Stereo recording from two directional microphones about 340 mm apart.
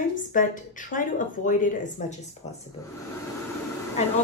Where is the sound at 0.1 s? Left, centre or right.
Left.